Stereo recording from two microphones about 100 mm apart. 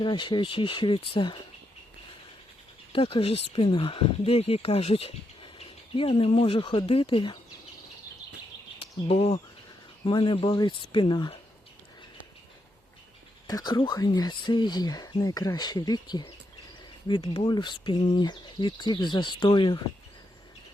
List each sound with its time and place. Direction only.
0.0 s speech: 50° left (ahead or behind)
2.9 s speech: 60° left (ahead or behind)
8.8 s speech: 85° left
10.1 s speech: 55° left (ahead or behind)
13.5 s speech: 40° left (ahead or behind)